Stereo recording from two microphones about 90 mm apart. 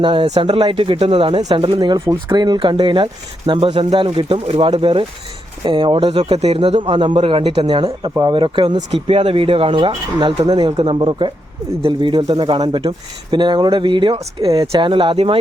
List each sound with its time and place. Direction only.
0.0 s speech: 75° right (ahead or behind)
1.7 s speech: 55° right (ahead or behind); by 5.0 s 80° right
5.6 s speech: 60° right (ahead or behind); by 7.7 s 90° right
7.7 s speech: 55° right (ahead or behind); by 14.7 s 90° right
14.8 s speech: 70° right (ahead or behind); by 15.4 s 85° right